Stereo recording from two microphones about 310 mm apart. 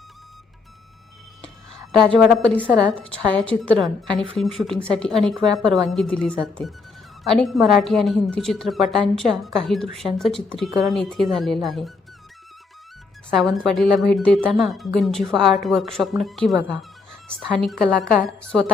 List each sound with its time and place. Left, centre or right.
1.4 s a sound: centre
2.7 s speech: centre
13.3 s speech: centre